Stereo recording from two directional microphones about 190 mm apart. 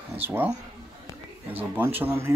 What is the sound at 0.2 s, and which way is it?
Speech, 10° right (ahead or behind).